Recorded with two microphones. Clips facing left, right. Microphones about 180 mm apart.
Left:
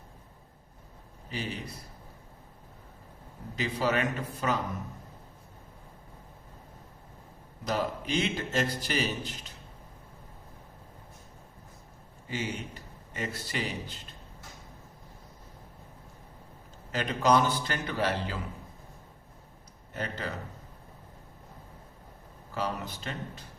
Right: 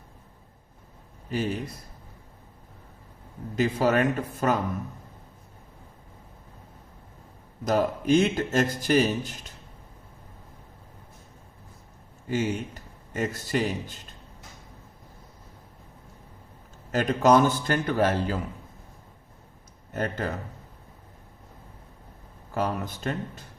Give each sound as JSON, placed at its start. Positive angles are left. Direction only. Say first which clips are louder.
{"t": 1.3, "sound": "a man's voice", "louder": "right 8 dB", "side_deg": -45}
{"t": 3.5, "sound": "a man's voice", "louder": "right 6 dB", "side_deg": -45}
{"t": 7.6, "sound": "a man's voice", "louder": "right 7 dB", "side_deg": -45}
{"t": 12.3, "sound": "a man's voice", "louder": "right 8 dB", "side_deg": -45}
{"t": 16.9, "sound": "a man's voice", "louder": "right 5 dB", "side_deg": -45}
{"t": 19.9, "sound": "a man's voice", "louder": "right 6 dB", "side_deg": -50}
{"t": 22.5, "sound": "a man's voice", "louder": "right 5 dB", "side_deg": -50}